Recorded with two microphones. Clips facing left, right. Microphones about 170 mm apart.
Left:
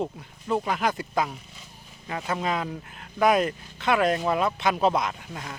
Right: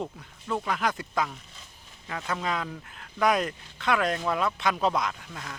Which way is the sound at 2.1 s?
20° left (ahead or behind).